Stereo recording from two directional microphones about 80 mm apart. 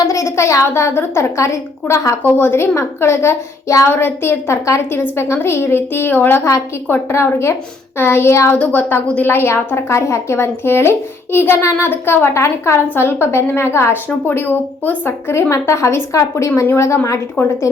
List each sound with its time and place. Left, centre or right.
0.1 s a woman's voice: left